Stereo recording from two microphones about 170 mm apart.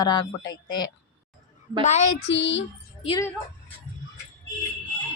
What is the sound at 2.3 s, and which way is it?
Child singing, 90° left.